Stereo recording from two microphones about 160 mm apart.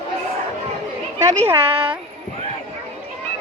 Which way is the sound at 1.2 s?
15° right (ahead or behind).